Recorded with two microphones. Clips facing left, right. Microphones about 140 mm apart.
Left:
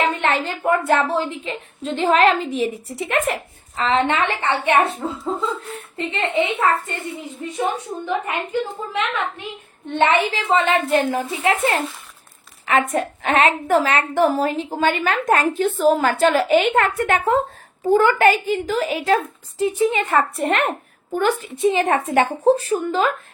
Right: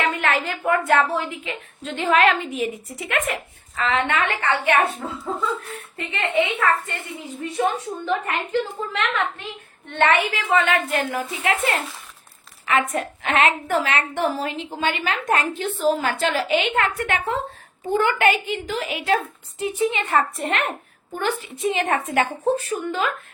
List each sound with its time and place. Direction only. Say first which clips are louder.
0.1 s a woman's voice: left 2 dB; 30° left (ahead or behind)
7.5 s a woman's voice: right 1 dB; 15° left (ahead or behind)
9.9 s a woman's voice: left 2 dB; 20° left (ahead or behind); by 21.5 s 45° left (ahead or behind)
21.6 s a woman's voice: left 4 dB; 30° left (ahead or behind)